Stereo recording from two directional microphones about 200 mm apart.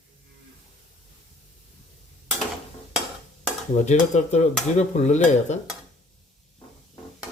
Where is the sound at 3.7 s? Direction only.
35° left (ahead or behind).